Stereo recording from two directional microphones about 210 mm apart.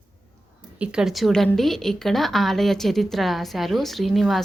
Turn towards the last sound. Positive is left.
turn(degrees=0)  # may be behind; listen again after turning